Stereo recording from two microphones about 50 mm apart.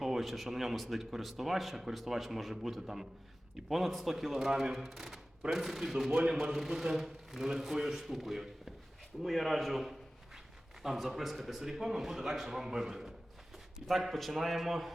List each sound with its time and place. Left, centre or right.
0.0 s a man's voice: centre